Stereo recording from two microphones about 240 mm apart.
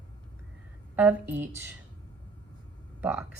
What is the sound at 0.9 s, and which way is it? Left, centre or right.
Speech, centre.